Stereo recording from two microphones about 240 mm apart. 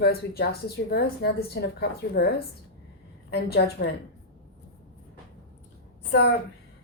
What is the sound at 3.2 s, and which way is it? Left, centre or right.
Speech, left.